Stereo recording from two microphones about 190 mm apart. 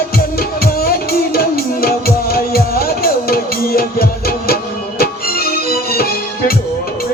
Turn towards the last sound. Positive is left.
turn(degrees=50)  # may be behind; listen again after turning